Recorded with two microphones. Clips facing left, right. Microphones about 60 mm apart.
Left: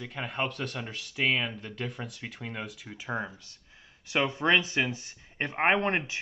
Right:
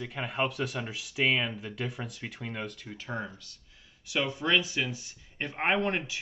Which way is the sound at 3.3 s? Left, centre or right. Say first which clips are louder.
Even; left.